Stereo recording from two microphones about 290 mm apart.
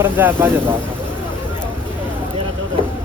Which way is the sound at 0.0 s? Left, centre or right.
Centre.